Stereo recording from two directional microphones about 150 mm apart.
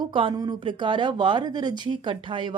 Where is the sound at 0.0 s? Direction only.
35° right (ahead or behind).